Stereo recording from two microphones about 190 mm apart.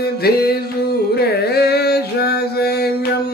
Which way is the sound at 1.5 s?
55° left (ahead or behind).